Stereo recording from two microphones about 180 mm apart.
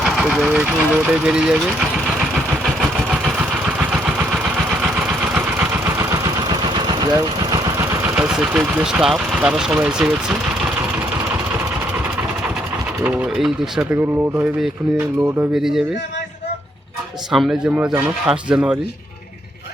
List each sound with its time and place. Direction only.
0.0 s speech: centre (ahead or behind)
6.8 s engine: 20° right (ahead or behind)
8.1 s speech: 5° right (ahead or behind)
13.0 s speech: 10° right (ahead or behind)
17.3 s speech: centre (ahead or behind)